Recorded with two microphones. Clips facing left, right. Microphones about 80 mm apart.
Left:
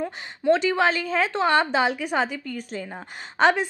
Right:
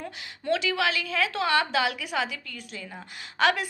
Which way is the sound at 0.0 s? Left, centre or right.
Left.